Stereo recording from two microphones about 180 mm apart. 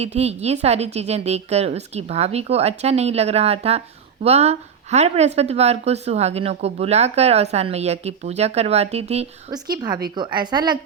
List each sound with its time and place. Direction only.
0.0 s a woman's voice: 35° right (ahead or behind)
9.5 s a woman's voice: 20° right (ahead or behind)